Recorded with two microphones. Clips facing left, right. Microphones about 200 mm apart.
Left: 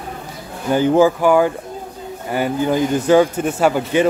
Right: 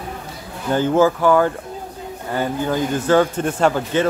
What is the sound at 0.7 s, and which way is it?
Speech, 15° left (ahead or behind).